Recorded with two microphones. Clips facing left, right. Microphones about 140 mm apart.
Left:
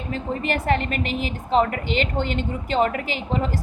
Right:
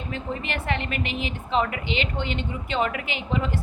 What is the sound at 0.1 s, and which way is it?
A woman's voice, 40° left (ahead or behind).